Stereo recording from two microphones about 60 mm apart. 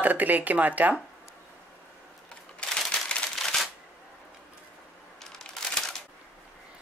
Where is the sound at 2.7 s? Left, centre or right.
Centre.